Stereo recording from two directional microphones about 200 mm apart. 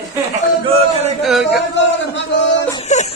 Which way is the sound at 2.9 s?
35° left (ahead or behind).